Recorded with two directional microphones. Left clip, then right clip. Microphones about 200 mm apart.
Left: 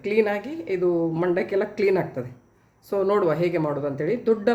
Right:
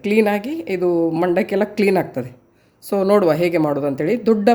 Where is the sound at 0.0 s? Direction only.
50° right (ahead or behind).